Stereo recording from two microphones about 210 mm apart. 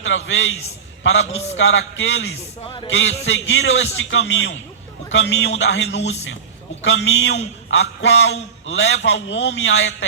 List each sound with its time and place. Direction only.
0.0 s a man's voice: 65° left (ahead or behind)
2.6 s music: 20° left (ahead or behind)
2.9 s a man's voice: 65° left (ahead or behind)